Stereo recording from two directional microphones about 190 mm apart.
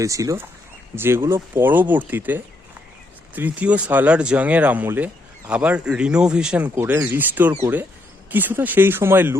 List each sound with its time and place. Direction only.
0.0 s speech: 15° right (ahead or behind)